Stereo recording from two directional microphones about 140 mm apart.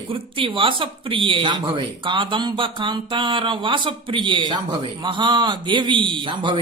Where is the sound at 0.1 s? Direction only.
40° right (ahead or behind).